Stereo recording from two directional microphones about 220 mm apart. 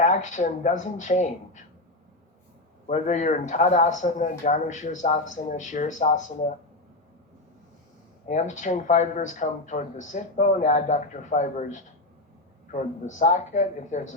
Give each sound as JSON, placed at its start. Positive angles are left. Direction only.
{"t": 0.0, "sound": "a man's voice", "side_deg": 35}
{"t": 2.8, "sound": "a man's voice", "side_deg": 35}
{"t": 8.3, "sound": "a man's voice", "side_deg": 35}